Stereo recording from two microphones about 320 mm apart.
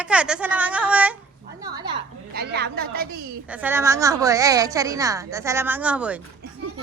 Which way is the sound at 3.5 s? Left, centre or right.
Centre.